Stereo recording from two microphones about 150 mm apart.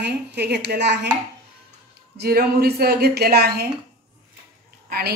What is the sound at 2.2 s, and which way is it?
A woman's voice, 90° right.